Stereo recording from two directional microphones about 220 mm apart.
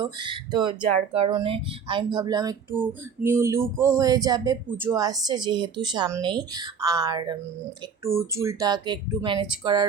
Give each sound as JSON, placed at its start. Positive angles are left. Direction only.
{"t": 0.0, "sound": "speech", "side_deg": -20}
{"t": 2.1, "sound": "a sound", "side_deg": -20}
{"t": 8.0, "sound": "speech", "side_deg": -15}